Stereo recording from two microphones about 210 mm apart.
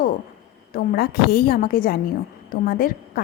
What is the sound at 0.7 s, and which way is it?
A woman's voice, 45° left (ahead or behind).